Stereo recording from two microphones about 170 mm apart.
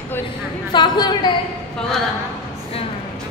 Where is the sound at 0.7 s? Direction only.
25° left (ahead or behind).